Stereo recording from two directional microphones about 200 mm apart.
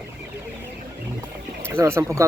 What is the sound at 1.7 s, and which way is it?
Speech, 15° right (ahead or behind).